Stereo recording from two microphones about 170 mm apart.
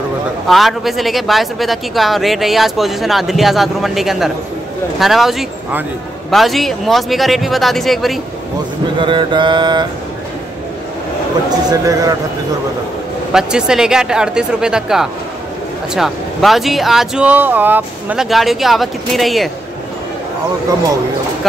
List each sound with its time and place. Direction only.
0.5 s speech: centre (ahead or behind)
9.0 s mantra: 30° right (ahead or behind)
11.7 s mantra: 20° right (ahead or behind)
13.3 s speech: 5° right (ahead or behind)